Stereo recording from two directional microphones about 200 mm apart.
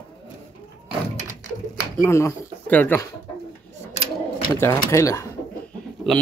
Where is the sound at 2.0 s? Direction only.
15° left (ahead or behind).